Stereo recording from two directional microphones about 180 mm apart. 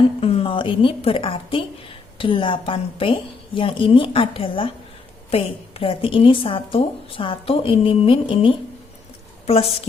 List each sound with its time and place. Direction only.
0.2 s a woman's voice: 30° left (ahead or behind)